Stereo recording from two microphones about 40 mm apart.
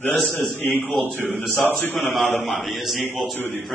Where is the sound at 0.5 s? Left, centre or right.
Left.